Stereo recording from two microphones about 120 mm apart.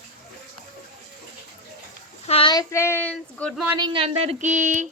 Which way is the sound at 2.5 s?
30° left (ahead or behind).